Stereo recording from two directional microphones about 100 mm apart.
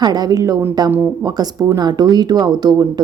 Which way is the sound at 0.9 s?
20° right (ahead or behind).